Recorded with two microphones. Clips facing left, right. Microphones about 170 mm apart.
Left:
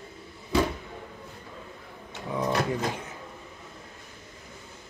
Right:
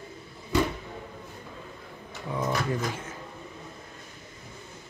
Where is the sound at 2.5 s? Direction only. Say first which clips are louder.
Left 3 dB; 25° left (ahead or behind).